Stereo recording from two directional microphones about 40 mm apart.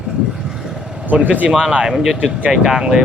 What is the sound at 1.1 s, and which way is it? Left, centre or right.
Speech, right.